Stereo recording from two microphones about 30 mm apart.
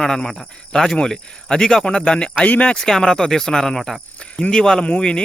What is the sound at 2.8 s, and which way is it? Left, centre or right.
Speech, centre.